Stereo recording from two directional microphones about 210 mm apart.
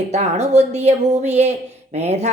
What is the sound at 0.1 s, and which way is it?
A woman's voice, 30° right (ahead or behind).